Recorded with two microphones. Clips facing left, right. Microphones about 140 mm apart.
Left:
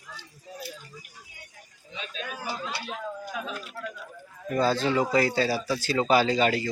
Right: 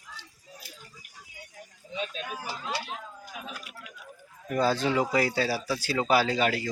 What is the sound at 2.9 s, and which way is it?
Chatter, 90° left.